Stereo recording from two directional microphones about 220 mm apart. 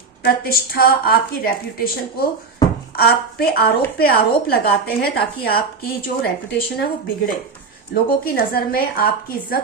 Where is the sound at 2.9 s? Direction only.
45° left (ahead or behind).